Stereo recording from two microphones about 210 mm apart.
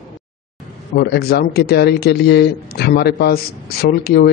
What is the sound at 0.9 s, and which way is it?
Speech, 50° left (ahead or behind).